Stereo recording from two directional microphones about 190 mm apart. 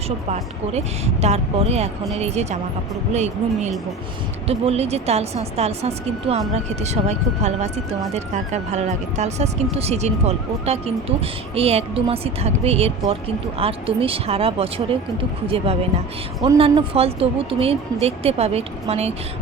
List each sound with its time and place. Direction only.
0.3 s speech: 35° right (ahead or behind)